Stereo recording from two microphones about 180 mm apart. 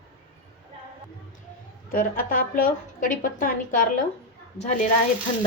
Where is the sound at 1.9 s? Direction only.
50° left (ahead or behind).